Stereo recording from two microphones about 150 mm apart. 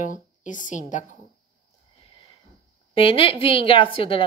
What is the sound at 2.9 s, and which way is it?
A woman's voice, 35° left (ahead or behind).